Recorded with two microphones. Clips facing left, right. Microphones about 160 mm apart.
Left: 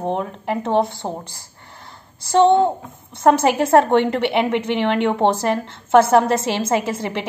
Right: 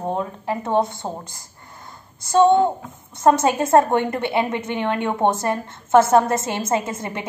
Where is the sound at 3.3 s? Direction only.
70° left (ahead or behind).